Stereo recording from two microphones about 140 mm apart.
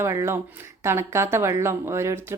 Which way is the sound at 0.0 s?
20° right (ahead or behind).